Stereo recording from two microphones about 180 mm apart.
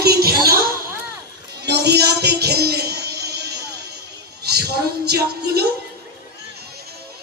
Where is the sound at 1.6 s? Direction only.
65° right (ahead or behind).